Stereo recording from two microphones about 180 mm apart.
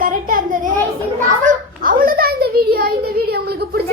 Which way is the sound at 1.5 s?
50° right (ahead or behind).